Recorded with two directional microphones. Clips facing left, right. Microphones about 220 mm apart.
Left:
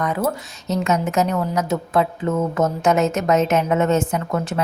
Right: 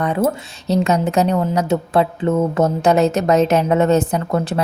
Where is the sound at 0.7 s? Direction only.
35° right (ahead or behind).